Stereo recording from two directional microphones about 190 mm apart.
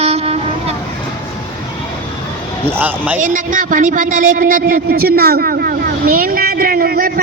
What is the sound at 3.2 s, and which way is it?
Speech, 45° right (ahead or behind).